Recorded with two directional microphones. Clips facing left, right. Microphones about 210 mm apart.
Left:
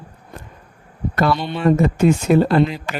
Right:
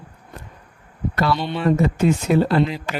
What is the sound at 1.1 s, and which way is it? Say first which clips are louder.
Speech: left 2 dB; 50° left (ahead or behind).